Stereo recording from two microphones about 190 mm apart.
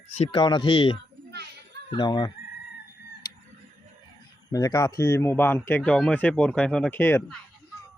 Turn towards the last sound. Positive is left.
turn(degrees=10)  # may be behind; listen again after turning